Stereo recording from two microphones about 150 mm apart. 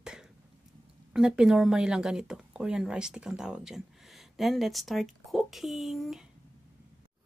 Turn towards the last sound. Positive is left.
turn(degrees=0)  # may be behind; listen again after turning